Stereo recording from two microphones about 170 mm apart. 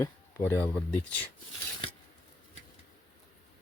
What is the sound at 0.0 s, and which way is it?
Speech, 15° left (ahead or behind).